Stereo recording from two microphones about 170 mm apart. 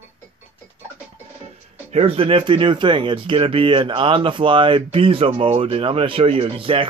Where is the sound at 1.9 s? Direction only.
35° right (ahead or behind).